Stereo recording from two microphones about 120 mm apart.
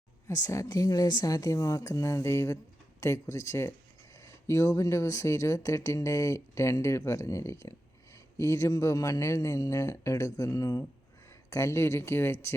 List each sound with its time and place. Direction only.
0.3 s speech: 25° left (ahead or behind)